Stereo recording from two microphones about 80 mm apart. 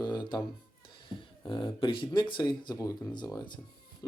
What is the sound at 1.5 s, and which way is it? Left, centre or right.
Speech, left.